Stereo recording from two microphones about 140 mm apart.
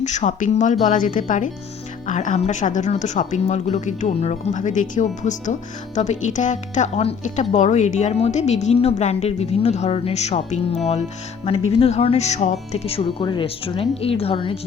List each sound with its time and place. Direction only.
0.0 s speech: 55° left (ahead or behind); by 14.6 s 40° left (ahead or behind)